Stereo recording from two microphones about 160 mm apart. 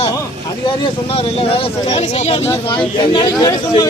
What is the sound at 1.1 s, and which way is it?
Speech, 35° left (ahead or behind).